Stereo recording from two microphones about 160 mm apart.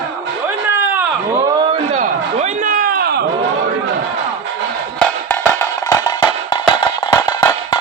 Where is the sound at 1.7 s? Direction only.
45° right (ahead or behind); by 3.3 s 80° right.